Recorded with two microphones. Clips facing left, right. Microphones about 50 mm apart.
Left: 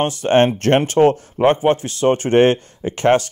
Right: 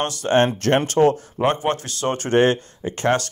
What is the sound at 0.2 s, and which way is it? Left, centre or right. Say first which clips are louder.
A man's voice: left 3 dB; left.